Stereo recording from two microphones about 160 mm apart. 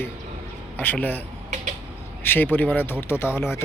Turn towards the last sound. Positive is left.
turn(degrees=15)  # may be behind; listen again after turning